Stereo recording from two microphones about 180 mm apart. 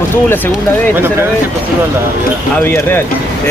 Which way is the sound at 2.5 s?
10° left (ahead or behind).